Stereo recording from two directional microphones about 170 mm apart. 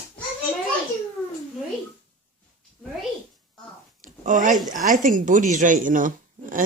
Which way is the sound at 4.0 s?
50° right (ahead or behind).